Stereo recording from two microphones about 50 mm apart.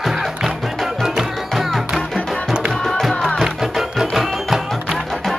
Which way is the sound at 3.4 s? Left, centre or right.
Centre.